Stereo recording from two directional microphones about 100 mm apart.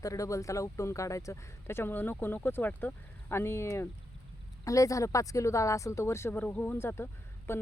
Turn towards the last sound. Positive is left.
turn(degrees=25)  # may be behind; listen again after turning